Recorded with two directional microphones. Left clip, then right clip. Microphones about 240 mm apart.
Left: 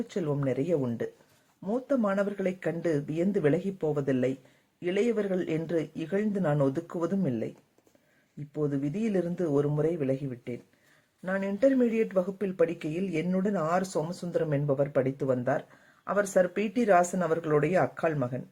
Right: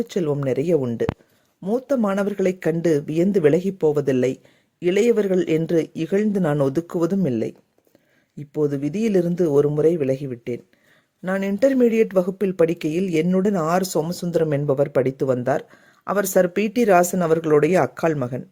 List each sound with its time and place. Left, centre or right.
0.1 s speech: right
8.5 s speech: right